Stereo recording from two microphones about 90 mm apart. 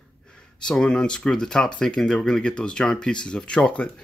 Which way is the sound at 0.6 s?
10° left (ahead or behind).